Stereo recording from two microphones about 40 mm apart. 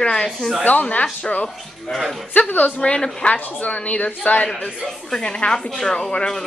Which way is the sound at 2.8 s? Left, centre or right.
Left.